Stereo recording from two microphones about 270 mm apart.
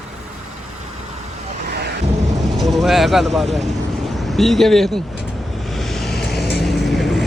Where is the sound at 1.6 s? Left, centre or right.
Right.